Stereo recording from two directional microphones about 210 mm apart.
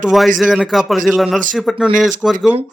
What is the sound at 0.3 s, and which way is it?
A man's voice, centre (ahead or behind).